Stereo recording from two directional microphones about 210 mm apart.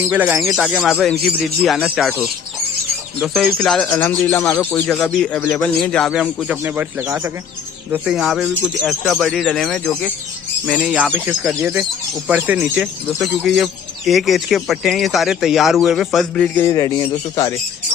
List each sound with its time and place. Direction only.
0.0 s speech: 10° right (ahead or behind)
10.8 s speech: 5° right (ahead or behind); by 16.9 s 15° left (ahead or behind)